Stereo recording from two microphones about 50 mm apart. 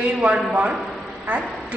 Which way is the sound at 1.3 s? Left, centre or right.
Right.